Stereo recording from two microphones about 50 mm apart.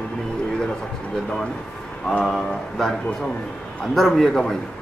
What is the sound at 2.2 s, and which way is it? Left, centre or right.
A man's voice, centre.